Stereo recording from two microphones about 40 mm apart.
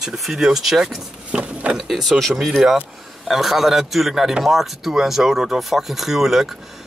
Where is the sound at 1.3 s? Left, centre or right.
Right.